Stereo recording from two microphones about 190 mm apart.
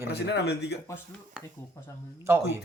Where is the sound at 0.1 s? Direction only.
65° left (ahead or behind).